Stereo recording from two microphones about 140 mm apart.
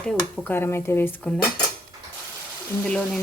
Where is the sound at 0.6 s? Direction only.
15° left (ahead or behind).